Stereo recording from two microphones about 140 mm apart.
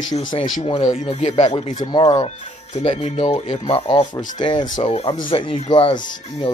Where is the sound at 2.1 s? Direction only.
50° left (ahead or behind).